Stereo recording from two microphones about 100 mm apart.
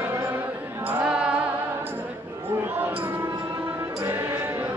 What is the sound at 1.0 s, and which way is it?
Music, 10° right (ahead or behind).